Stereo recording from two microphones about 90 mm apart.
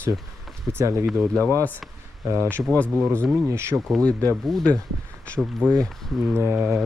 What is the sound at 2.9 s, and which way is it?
Speech, 20° right (ahead or behind).